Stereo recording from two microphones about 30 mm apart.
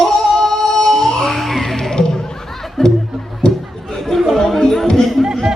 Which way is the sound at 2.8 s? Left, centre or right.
Centre.